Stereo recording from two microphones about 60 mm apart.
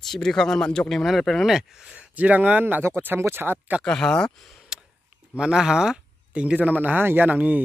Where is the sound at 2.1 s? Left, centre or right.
Right.